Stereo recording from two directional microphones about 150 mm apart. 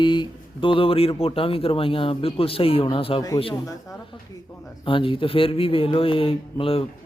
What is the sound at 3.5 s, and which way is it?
Speech, 20° left (ahead or behind).